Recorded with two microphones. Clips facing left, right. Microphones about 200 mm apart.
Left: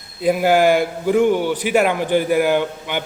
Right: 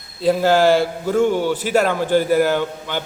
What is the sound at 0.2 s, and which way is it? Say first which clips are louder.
A man's voice: even; 15° left (ahead or behind).